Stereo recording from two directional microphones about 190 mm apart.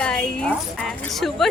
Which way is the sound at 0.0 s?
5° left (ahead or behind).